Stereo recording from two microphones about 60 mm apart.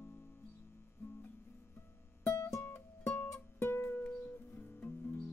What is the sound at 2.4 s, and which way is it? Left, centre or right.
Music, left.